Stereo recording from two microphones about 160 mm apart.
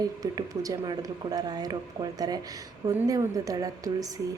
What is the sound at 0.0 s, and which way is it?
A woman's voice, 20° right (ahead or behind).